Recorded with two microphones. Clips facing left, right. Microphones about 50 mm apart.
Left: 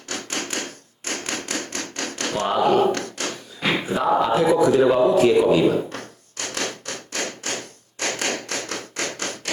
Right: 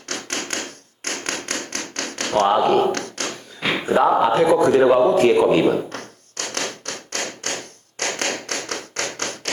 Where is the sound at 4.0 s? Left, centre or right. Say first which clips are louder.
Right 4 dB; right.